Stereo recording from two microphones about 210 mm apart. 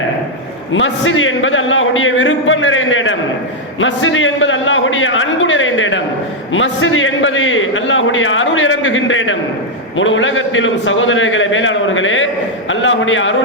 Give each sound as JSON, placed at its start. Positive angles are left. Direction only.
{"t": 0.7, "sound": "a man's voice", "side_deg": 65}